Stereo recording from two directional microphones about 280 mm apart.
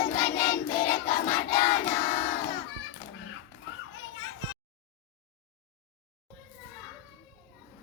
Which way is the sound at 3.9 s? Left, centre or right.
Left.